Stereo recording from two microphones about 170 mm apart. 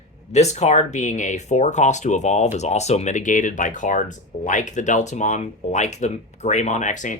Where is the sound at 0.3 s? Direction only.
40° left (ahead or behind).